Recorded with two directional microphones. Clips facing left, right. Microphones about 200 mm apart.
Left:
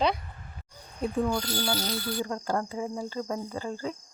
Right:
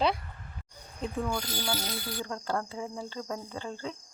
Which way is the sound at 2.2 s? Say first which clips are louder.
Left 3 dB; 10° left (ahead or behind).